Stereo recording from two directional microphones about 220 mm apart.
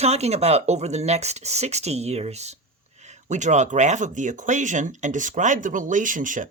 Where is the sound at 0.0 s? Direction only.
30° right (ahead or behind).